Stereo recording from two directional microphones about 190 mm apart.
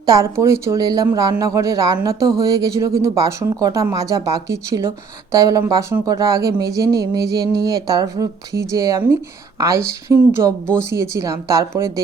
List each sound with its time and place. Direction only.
0.0 s speech: 15° right (ahead or behind)